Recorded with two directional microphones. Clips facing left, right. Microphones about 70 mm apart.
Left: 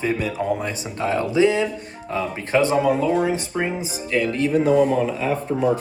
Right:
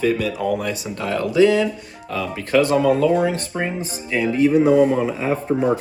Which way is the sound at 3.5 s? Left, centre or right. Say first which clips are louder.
Even; centre.